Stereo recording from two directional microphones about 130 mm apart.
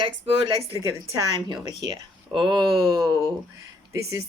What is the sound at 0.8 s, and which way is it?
Speech, 25° right (ahead or behind).